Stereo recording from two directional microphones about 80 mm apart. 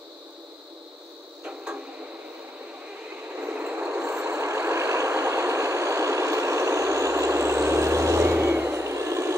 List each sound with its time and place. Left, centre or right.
3.3 s train: right
4.2 s vehicle: right